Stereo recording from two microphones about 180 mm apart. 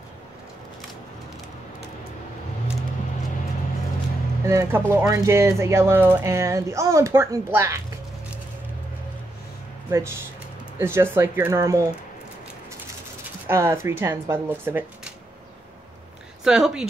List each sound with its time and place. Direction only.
4.5 s speech: 15° right (ahead or behind)
9.8 s speech: 15° right (ahead or behind)
13.5 s speech: 15° right (ahead or behind)
16.4 s speech: 5° right (ahead or behind)